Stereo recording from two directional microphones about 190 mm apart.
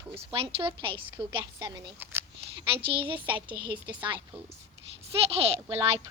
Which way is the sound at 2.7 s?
25° right (ahead or behind).